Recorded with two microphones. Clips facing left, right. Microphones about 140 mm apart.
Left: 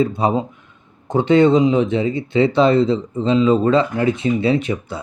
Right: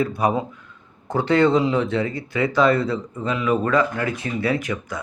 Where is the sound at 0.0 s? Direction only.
25° left (ahead or behind).